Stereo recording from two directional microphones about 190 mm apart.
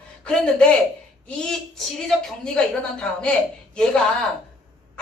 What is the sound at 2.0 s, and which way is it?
A woman's voice, 5° left (ahead or behind).